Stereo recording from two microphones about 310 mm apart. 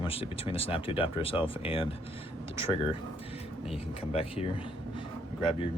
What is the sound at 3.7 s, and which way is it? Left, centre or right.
Speech, centre.